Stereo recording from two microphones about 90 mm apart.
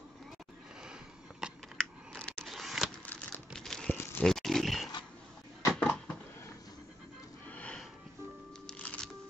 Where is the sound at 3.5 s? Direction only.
5° left (ahead or behind).